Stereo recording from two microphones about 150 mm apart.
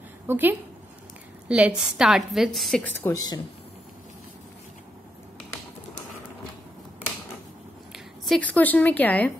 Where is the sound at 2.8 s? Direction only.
15° left (ahead or behind).